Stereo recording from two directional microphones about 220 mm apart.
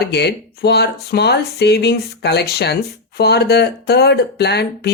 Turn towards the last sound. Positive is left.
turn(degrees=50)  # may be behind; listen again after turning